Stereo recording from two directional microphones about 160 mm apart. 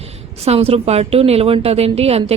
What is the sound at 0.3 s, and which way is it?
A woman's voice, 40° right (ahead or behind).